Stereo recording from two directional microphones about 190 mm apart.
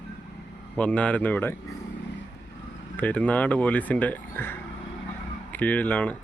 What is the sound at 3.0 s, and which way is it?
Speech, 10° left (ahead or behind).